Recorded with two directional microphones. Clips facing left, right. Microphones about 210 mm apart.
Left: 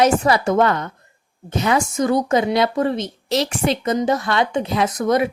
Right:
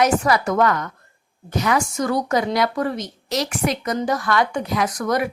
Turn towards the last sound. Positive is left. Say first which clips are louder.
# left 3 dB
turn(degrees=25)  # may be behind; listen again after turning